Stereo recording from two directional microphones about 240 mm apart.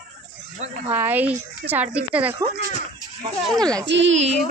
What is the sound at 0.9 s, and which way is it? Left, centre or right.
Speech, centre.